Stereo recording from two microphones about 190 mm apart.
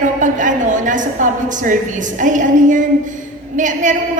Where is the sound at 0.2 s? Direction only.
40° right (ahead or behind).